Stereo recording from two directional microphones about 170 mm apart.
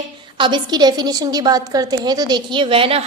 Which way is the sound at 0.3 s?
30° right (ahead or behind).